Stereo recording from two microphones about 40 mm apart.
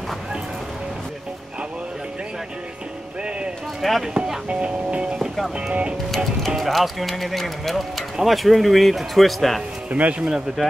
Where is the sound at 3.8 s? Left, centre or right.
Centre.